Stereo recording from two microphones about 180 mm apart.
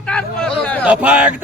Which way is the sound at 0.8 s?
5° right (ahead or behind).